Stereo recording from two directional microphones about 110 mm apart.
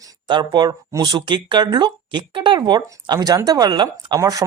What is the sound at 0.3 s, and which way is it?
Speech, 45° right (ahead or behind).